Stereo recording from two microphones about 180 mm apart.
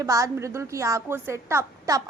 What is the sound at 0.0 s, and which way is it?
A woman's voice, 15° right (ahead or behind).